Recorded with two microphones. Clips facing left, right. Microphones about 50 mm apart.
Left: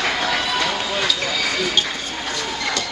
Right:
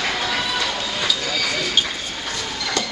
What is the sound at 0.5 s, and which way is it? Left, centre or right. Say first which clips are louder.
Music: left 2 dB; centre.